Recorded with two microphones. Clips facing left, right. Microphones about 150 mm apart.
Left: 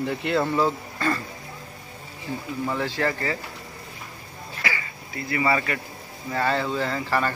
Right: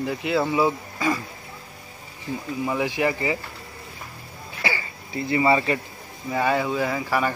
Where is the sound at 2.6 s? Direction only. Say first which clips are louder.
Right 2 dB; 10° right (ahead or behind).